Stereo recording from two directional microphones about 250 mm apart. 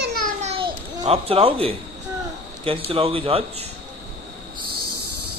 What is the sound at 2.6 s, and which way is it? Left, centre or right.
A man's voice, right.